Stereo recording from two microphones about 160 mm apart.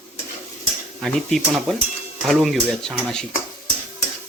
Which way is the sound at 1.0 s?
Centre (ahead or behind).